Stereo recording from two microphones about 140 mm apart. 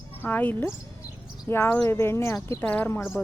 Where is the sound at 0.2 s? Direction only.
10° left (ahead or behind).